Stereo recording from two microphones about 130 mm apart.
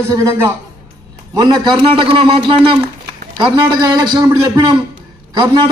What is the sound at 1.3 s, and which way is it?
A man's voice, 35° right (ahead or behind).